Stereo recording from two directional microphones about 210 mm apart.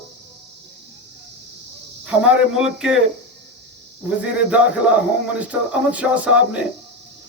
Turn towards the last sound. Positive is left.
turn(degrees=-5)  # may be behind; listen again after turning